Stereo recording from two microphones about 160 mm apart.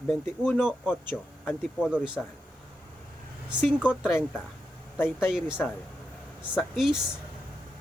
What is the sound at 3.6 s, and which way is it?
Speech, 5° right (ahead or behind).